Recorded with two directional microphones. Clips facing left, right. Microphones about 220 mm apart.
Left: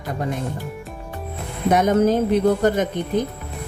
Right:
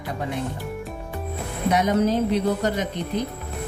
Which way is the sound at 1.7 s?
50° left (ahead or behind).